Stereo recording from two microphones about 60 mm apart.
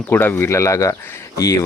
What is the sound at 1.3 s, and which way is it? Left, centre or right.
Speech, left.